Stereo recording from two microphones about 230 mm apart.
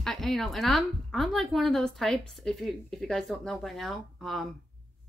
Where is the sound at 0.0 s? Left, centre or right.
Centre.